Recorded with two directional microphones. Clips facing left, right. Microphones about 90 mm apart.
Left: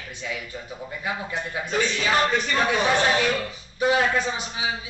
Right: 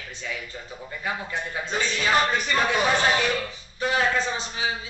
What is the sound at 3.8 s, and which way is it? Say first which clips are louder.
Speech: left 2 dB; 15° left (ahead or behind).